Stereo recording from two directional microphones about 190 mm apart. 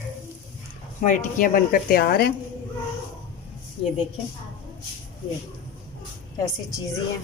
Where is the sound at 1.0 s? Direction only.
45° left (ahead or behind).